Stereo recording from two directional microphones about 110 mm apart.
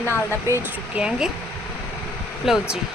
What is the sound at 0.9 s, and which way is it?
Speech, 10° right (ahead or behind).